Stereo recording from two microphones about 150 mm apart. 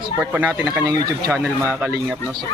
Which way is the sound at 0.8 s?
25° right (ahead or behind).